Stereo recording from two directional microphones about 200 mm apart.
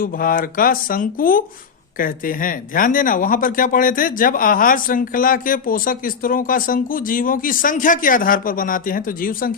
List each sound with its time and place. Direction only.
0.0 s speech: 45° left (ahead or behind)